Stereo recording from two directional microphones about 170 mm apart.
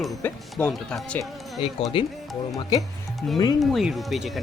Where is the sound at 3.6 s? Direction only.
Centre (ahead or behind).